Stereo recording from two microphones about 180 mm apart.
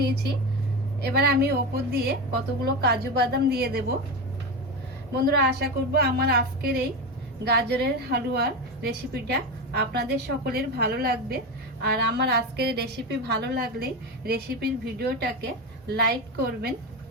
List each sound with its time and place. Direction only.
0.0 s a woman's voice: 65° right (ahead or behind)
5.1 s a woman's voice: 65° right (ahead or behind)